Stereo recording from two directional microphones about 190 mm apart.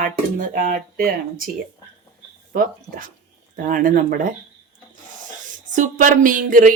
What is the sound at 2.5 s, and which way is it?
Speech, 45° right (ahead or behind).